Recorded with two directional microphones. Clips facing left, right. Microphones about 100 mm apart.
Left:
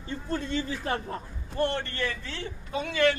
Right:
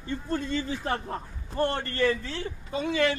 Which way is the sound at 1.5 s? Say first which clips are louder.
Right 1 dB; 35° right (ahead or behind).